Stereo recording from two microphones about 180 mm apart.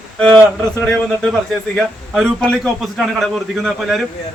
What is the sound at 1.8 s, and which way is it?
A man's voice, 5° left (ahead or behind).